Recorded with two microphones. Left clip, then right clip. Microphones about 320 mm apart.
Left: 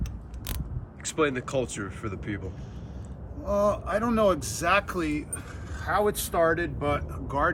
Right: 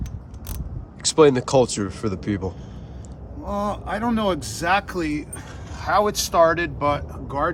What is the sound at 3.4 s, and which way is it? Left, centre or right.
Speech, centre.